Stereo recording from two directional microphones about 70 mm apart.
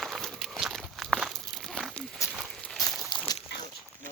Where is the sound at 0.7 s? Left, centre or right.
Centre.